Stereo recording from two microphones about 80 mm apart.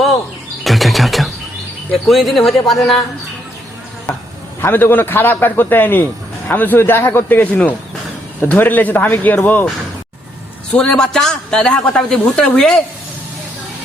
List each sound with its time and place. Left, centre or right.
0.6 s a sound: centre
2.0 s speech: centre
4.6 s a man's voice: left
10.8 s a woman's voice: centre